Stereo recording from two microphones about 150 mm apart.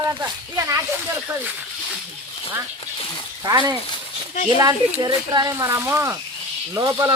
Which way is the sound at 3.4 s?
30° right (ahead or behind).